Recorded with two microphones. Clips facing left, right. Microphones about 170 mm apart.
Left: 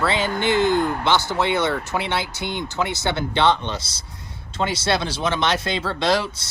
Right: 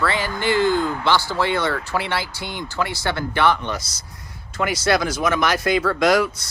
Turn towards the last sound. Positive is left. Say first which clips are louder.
# right 4 dB
turn(degrees=30)  # may be behind; listen again after turning